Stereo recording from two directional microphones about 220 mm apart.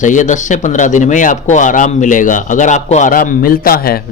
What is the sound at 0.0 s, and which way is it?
Speech, 35° left (ahead or behind).